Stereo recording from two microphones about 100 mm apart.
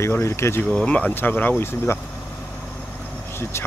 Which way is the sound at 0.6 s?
10° left (ahead or behind).